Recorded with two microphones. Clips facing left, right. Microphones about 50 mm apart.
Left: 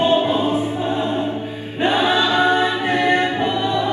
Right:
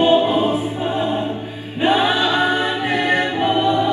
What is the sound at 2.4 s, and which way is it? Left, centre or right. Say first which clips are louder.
A capella: left 2 dB; left.